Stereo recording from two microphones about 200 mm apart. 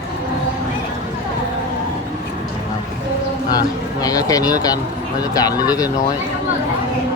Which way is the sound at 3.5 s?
20° left (ahead or behind).